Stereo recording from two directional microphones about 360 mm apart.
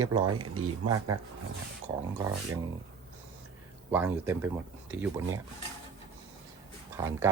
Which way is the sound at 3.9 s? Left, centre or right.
Centre.